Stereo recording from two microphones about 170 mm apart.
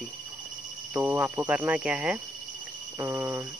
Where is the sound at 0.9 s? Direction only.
10° right (ahead or behind).